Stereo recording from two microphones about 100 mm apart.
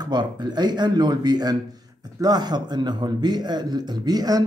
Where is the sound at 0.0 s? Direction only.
45° right (ahead or behind).